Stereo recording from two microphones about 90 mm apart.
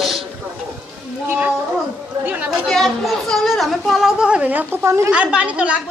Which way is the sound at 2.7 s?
Centre (ahead or behind).